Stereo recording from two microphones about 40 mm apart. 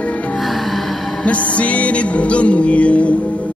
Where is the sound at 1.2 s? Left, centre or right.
Left.